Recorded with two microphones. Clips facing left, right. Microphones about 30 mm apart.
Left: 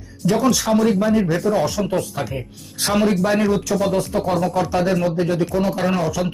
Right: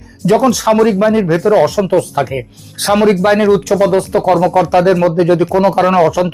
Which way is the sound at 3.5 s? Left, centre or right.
Right.